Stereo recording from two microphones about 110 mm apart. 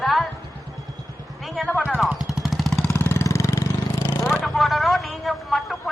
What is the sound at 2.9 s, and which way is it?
Vehicle, 20° left (ahead or behind).